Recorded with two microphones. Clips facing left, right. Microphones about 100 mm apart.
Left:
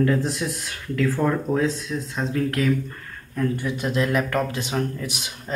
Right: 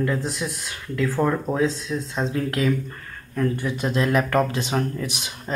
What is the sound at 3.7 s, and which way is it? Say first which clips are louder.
Speech: right 2 dB; 25° right (ahead or behind).